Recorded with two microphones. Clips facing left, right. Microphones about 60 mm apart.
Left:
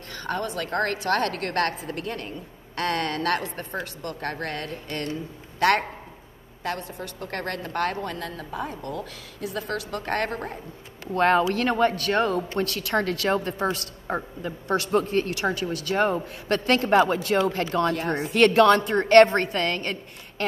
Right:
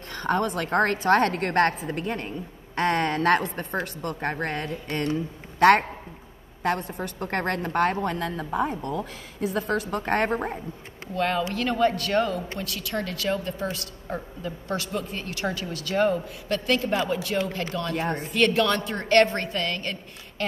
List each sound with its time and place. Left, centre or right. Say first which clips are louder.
0.1 s a woman's voice: right 4 dB; right
11.1 s a woman's voice: left 5 dB; left
12.5 s a woman's voice: left 6 dB; left
15.3 s a woman's voice: left 3 dB; left